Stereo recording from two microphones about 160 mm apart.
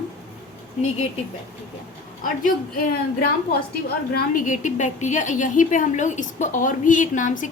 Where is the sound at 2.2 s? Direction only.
60° left (ahead or behind).